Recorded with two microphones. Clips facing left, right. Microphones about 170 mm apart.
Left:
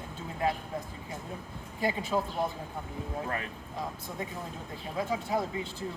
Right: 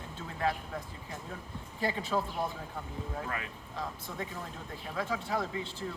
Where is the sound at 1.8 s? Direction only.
15° left (ahead or behind).